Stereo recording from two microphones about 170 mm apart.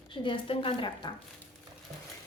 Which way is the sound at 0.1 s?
30° left (ahead or behind).